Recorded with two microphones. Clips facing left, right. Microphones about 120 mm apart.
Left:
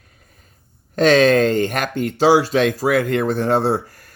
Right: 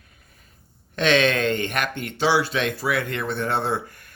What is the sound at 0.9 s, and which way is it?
Speech, 40° left (ahead or behind).